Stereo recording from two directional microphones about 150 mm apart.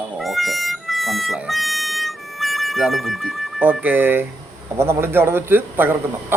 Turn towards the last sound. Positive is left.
turn(degrees=-15)  # may be behind; listen again after turning